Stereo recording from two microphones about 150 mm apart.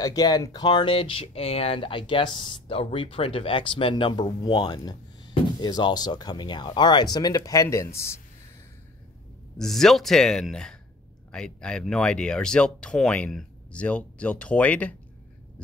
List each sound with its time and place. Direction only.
0.0 s speech: 25° left (ahead or behind)
9.6 s speech: centre (ahead or behind)